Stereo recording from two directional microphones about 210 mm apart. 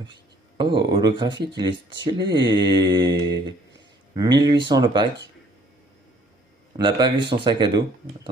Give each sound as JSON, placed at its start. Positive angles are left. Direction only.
{"t": 0.0, "sound": "speech", "side_deg": -20}
{"t": 6.8, "sound": "speech", "side_deg": -20}